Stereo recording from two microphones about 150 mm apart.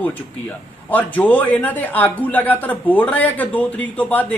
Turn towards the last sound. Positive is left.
turn(degrees=10)  # may be behind; listen again after turning